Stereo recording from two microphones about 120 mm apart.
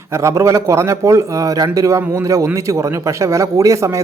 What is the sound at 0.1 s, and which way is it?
A man's voice, 25° right (ahead or behind).